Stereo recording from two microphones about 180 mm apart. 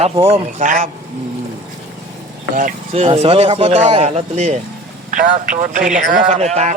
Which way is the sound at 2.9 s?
35° right (ahead or behind).